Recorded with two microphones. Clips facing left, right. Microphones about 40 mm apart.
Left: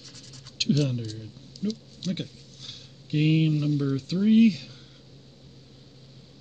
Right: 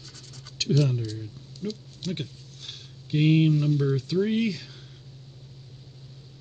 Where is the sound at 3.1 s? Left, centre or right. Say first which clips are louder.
Right 2 dB; right.